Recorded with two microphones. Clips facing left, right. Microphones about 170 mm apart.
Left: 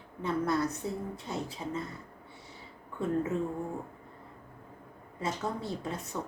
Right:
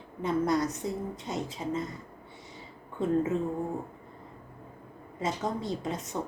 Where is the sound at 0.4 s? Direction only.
15° right (ahead or behind).